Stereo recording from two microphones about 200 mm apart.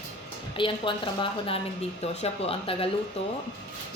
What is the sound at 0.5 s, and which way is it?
A woman's voice, 25° left (ahead or behind).